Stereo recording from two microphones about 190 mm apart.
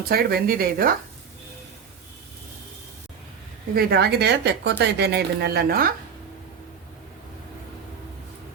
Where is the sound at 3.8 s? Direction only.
55° right (ahead or behind).